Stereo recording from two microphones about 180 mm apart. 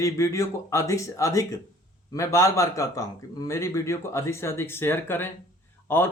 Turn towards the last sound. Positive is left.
turn(degrees=10)  # may be behind; listen again after turning